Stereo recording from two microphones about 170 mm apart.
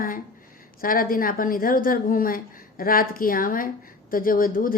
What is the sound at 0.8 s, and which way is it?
A woman's voice, 55° left (ahead or behind).